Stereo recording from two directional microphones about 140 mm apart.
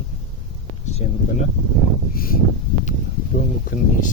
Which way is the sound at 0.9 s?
55° left (ahead or behind).